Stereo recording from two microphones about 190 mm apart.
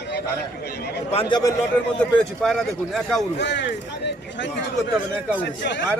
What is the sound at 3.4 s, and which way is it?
A man's voice, 65° left (ahead or behind).